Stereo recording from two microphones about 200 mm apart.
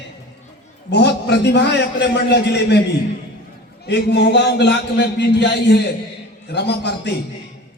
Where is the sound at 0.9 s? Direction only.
60° left (ahead or behind).